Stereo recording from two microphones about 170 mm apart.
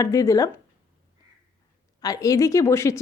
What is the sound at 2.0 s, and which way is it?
A woman's voice, 20° left (ahead or behind).